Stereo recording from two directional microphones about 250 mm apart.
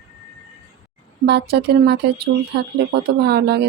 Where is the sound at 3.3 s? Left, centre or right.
Right.